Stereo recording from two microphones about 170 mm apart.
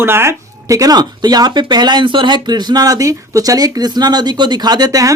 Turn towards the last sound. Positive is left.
turn(degrees=-20)  # may be behind; listen again after turning